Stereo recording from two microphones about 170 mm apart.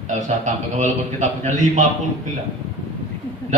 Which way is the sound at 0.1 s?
45° right (ahead or behind).